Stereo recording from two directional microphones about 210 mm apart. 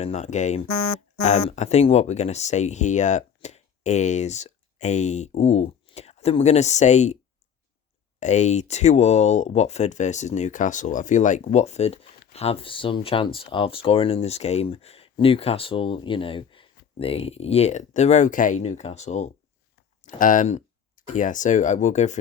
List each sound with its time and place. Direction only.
0.0 s speech: 30° left (ahead or behind)
8.2 s speech: 35° left (ahead or behind)